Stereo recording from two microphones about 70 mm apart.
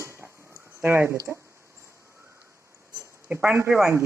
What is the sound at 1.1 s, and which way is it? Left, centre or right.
Speech, right.